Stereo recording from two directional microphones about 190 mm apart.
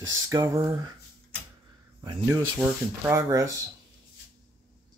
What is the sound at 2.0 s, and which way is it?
Speech, 25° right (ahead or behind).